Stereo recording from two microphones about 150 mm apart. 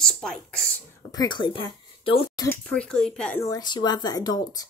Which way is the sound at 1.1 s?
30° left (ahead or behind).